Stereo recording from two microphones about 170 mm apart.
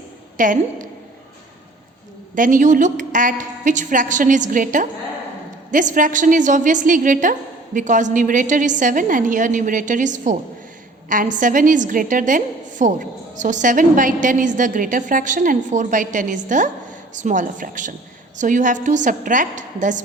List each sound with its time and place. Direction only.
0.3 s a woman's voice: 50° right (ahead or behind)
2.3 s a woman's voice: 50° right (ahead or behind)